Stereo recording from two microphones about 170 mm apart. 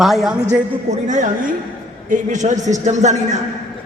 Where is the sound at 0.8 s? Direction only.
45° right (ahead or behind).